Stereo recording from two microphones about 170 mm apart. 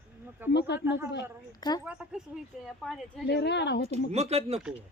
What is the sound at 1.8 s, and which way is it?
Speech, 5° right (ahead or behind).